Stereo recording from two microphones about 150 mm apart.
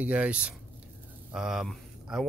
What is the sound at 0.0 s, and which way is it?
Speech, 10° right (ahead or behind).